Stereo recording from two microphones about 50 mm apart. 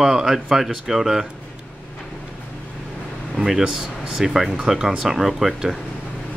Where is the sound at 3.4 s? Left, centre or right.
Centre.